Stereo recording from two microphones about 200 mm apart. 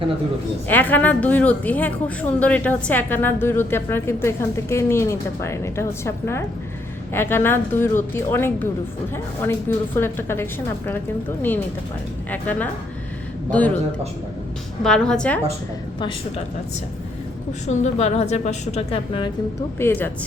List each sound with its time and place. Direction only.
0.7 s a woman's voice: 10° left (ahead or behind)
12.3 s a woman's voice: 10° left (ahead or behind)
14.8 s a woman's voice: 5° left (ahead or behind)
17.7 s a woman's voice: 35° left (ahead or behind)
19.8 s a woman's voice: 10° left (ahead or behind)